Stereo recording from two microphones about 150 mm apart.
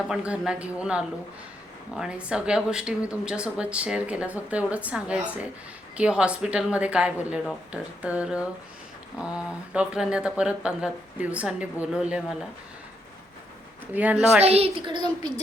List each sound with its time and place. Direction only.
0.1 s speech: 5° right (ahead or behind)
13.9 s speech: 10° right (ahead or behind)
14.4 s a woman's voice: 40° right (ahead or behind)